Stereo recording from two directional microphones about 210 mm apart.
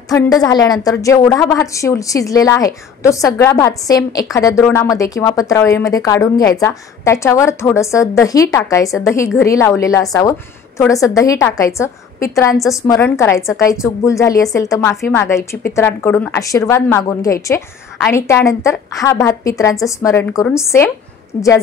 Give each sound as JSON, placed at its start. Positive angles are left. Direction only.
{"t": 0.1, "sound": "a woman's voice", "side_deg": 15}